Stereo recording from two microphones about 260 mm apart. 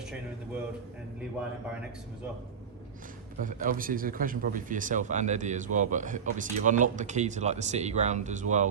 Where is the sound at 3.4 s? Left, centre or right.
Right.